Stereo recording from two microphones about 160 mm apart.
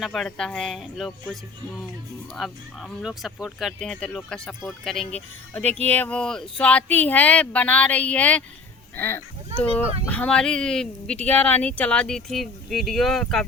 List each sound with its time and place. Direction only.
0.0 s speech: centre (ahead or behind)
9.5 s speech: 45° right (ahead or behind)
10.1 s speech: 5° left (ahead or behind)